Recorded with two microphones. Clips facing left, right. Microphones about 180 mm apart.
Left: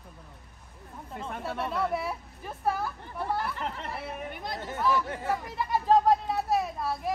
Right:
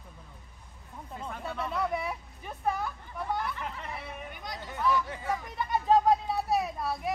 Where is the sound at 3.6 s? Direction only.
60° left (ahead or behind).